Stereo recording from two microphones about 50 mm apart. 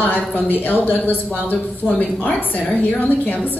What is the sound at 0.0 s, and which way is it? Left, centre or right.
A woman's voice, left.